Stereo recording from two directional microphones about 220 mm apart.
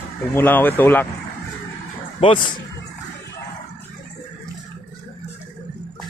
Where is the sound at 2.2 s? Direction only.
20° left (ahead or behind).